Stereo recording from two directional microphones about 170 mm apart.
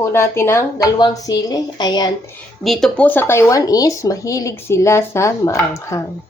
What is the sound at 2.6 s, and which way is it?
Speech, centre (ahead or behind).